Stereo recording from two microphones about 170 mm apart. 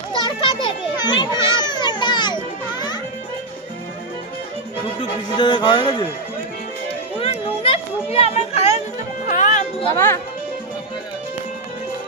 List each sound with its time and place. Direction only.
0.3 s children playing: 30° left (ahead or behind)
5.4 s speech: 25° left (ahead or behind)
7.2 s a sound: 35° left (ahead or behind)
9.2 s music: 45° left (ahead or behind)
9.9 s speech: 15° left (ahead or behind)